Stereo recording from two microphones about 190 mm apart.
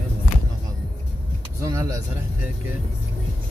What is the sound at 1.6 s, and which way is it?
Vehicle, 15° right (ahead or behind).